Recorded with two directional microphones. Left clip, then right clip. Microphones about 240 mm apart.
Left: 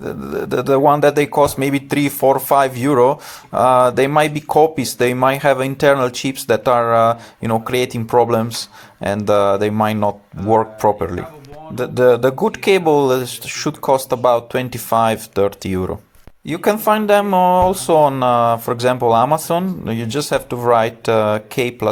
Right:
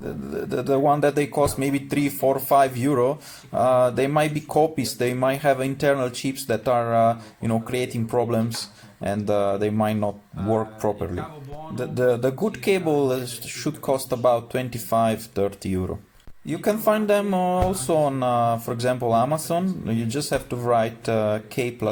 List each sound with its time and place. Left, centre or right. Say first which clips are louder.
0.0 s speech: left 7 dB; centre